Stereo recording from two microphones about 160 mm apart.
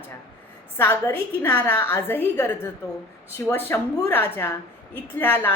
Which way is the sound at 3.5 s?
15° left (ahead or behind).